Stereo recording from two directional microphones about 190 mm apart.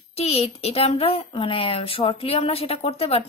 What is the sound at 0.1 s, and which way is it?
A woman's voice, 30° left (ahead or behind).